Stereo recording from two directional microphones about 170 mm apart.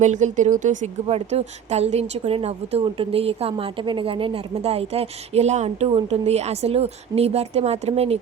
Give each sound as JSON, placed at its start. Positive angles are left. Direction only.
{"t": 0.0, "sound": "a woman's voice", "side_deg": -45}